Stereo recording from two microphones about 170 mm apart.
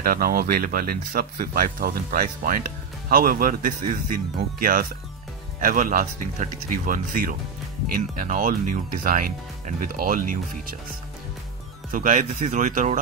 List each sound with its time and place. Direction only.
0.0 s speech: 55° right (ahead or behind)
11.9 s speech: 50° right (ahead or behind)